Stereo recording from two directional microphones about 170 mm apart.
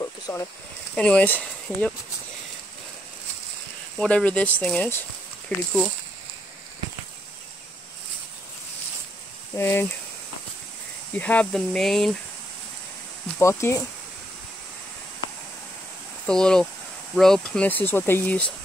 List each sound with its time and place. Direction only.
0.0 s a sound: 15° left (ahead or behind)
0.9 s speech: 5° left (ahead or behind)
4.0 s speech: 5° left (ahead or behind)
9.6 s speech: 15° left (ahead or behind)
11.1 s speech: 10° left (ahead or behind)
13.4 s speech: 15° left (ahead or behind)
16.3 s speech: 5° left (ahead or behind)